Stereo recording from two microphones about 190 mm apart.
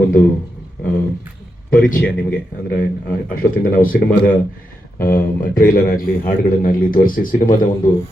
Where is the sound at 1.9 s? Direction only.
50° left (ahead or behind).